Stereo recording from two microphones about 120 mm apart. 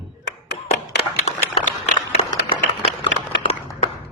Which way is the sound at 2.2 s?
55° left (ahead or behind).